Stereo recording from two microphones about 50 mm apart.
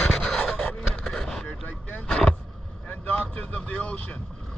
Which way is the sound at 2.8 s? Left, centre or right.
Left.